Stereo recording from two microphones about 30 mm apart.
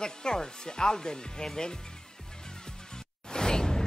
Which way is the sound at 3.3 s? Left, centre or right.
Left.